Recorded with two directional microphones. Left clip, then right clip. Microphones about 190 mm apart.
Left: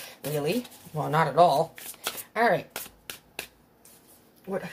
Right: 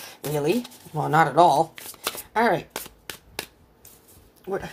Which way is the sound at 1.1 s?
50° right (ahead or behind).